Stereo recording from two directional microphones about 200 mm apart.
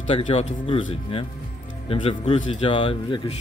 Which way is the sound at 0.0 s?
30° left (ahead or behind).